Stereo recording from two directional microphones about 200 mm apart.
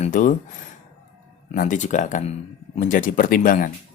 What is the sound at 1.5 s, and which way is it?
Speech, 40° left (ahead or behind).